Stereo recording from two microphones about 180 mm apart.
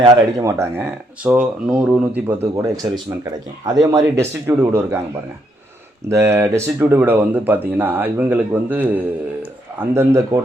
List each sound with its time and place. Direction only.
0.0 s speech: 20° right (ahead or behind)
6.1 s speech: 15° right (ahead or behind)
9.9 s speech: 15° right (ahead or behind)